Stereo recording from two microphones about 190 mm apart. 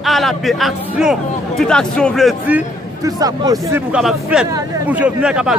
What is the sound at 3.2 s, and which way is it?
Speech, 20° right (ahead or behind).